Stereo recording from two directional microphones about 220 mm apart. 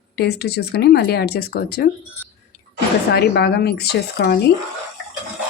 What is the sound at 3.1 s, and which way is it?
Speech, 45° left (ahead or behind).